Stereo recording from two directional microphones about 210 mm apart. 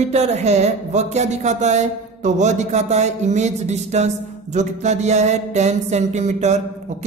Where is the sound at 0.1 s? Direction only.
30° right (ahead or behind).